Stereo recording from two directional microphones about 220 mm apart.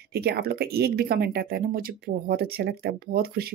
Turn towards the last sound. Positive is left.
turn(degrees=-45)  # may be behind; listen again after turning